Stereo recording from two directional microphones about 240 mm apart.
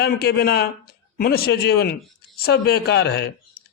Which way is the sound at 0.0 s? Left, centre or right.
Left.